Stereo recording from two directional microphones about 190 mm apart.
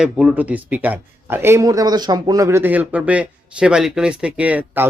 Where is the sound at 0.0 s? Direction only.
5° right (ahead or behind).